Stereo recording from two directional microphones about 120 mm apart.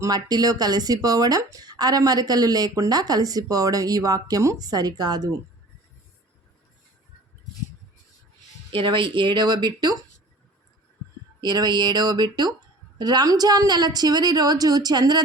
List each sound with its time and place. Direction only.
0.0 s speech: 35° right (ahead or behind)
8.7 s speech: 45° right (ahead or behind)
11.3 s speech: 35° right (ahead or behind)